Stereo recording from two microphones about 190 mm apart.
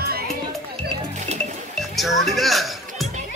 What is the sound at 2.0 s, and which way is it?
Music, centre (ahead or behind).